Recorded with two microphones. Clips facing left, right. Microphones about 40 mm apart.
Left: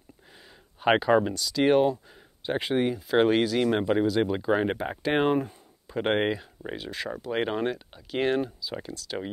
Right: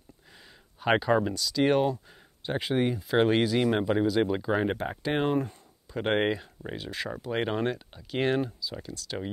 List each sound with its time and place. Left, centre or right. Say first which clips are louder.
0.7 s speech: left 3 dB; centre
8.6 s speech: left 2 dB; left
8.9 s speech: left 1 dB; centre